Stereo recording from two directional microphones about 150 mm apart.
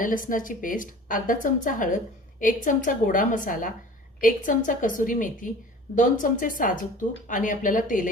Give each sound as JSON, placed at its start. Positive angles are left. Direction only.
{"t": 0.0, "sound": "speech", "side_deg": 65}